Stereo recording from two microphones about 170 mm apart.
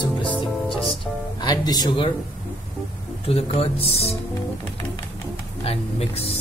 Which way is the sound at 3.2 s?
35° left (ahead or behind).